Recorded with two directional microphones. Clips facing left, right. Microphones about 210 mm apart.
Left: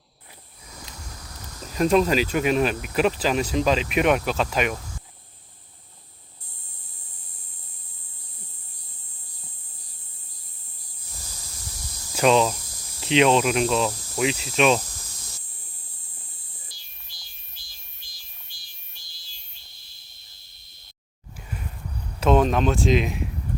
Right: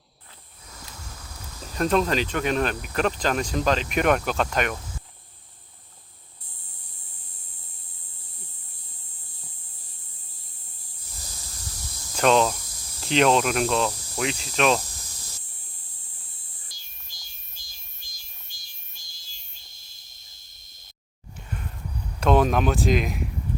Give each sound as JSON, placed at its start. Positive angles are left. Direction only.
{"t": 1.6, "sound": "speech", "side_deg": 10}
{"t": 12.1, "sound": "speech", "side_deg": 5}
{"t": 16.7, "sound": "insect", "side_deg": -45}
{"t": 22.2, "sound": "speech", "side_deg": 0}